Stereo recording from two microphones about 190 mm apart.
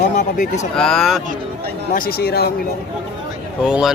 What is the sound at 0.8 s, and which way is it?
Speech, centre (ahead or behind).